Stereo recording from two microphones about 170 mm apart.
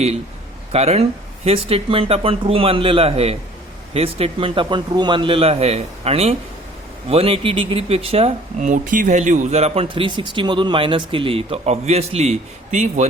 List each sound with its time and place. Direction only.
0.7 s speech: 35° right (ahead or behind)